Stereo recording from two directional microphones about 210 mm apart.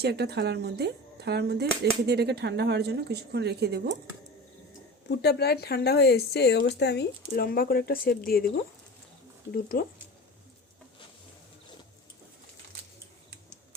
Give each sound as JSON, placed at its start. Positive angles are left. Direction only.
{"t": 0.0, "sound": "speech", "side_deg": -50}
{"t": 5.0, "sound": "speech", "side_deg": 50}
{"t": 9.5, "sound": "speech", "side_deg": 45}